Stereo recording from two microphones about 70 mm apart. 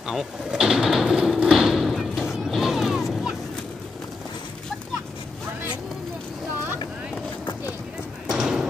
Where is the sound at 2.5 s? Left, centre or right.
Centre.